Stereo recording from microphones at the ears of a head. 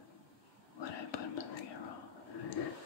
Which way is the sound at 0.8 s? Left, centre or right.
Left.